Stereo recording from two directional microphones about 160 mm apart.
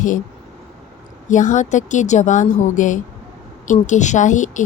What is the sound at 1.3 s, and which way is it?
Speech, 50° left (ahead or behind).